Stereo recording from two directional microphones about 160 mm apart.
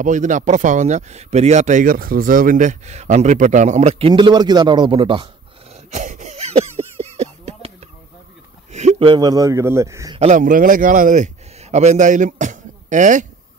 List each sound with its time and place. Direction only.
0.0 s speech: 50° right (ahead or behind)
4.1 s a man's voice: 30° right (ahead or behind)
5.9 s a sound: 50° right (ahead or behind)
9.0 s a man's voice: 25° right (ahead or behind)
10.1 s speech: 45° right (ahead or behind)